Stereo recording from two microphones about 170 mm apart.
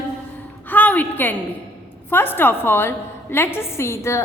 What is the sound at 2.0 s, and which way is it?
A woman's voice, 10° left (ahead or behind).